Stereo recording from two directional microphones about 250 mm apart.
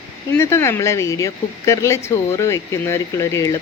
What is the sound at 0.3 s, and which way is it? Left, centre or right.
Speech, centre.